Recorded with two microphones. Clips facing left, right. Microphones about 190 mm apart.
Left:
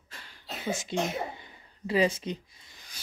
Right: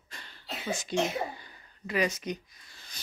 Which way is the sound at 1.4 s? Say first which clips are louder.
Left 3 dB; 25° left (ahead or behind).